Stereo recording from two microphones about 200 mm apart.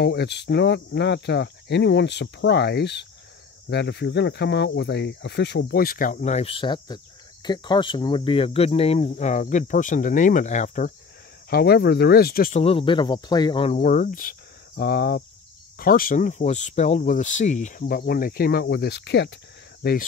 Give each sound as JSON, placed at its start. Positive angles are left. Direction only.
{"t": 0.0, "sound": "speech", "side_deg": 55}
{"t": 11.5, "sound": "speech", "side_deg": 50}
{"t": 12.5, "sound": "speech", "side_deg": 30}